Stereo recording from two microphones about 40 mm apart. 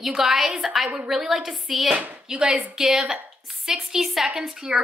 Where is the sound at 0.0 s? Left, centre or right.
Centre.